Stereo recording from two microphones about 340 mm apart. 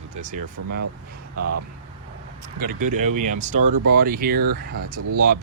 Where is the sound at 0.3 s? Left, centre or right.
Right.